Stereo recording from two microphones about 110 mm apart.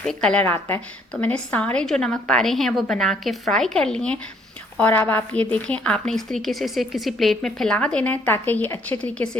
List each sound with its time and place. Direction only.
0.0 s a woman's voice: 5° left (ahead or behind)
0.4 s a woman's voice: 20° left (ahead or behind)